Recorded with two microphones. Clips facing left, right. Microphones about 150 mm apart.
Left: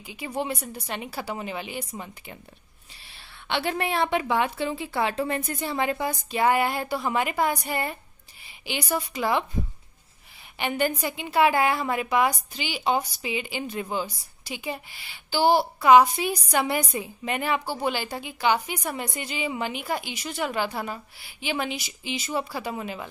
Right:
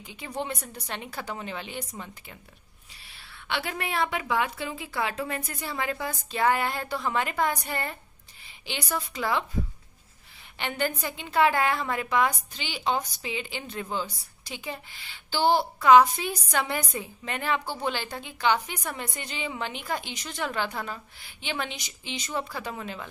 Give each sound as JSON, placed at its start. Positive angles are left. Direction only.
{"t": 0.0, "sound": "a woman's voice", "side_deg": 10}
{"t": 3.4, "sound": "a woman's voice", "side_deg": 25}
{"t": 10.6, "sound": "a woman's voice", "side_deg": 10}